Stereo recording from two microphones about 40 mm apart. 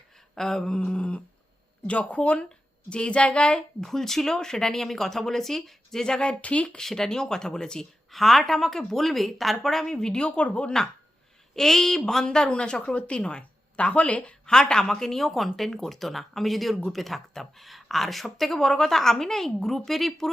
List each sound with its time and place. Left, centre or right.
0.3 s speech: centre
0.9 s a woman's voice: left
3.8 s speech: centre
6.2 s speech: left
6.7 s speech: centre; by 10.8 s left
11.5 s speech: centre
12.5 s a woman's voice: left
14.4 s speech: centre